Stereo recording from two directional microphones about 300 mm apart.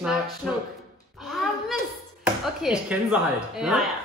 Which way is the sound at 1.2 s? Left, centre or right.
Centre.